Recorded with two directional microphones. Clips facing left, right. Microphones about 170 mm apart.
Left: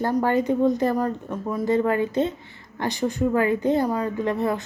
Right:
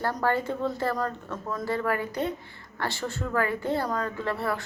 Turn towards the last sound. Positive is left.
turn(degrees=20)  # may be behind; listen again after turning